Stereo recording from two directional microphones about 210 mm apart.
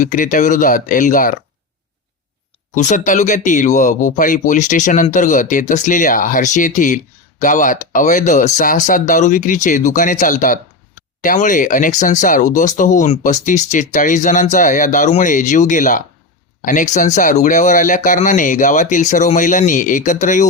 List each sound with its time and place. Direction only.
0.0 s speech: 40° left (ahead or behind)
2.7 s speech: 35° left (ahead or behind)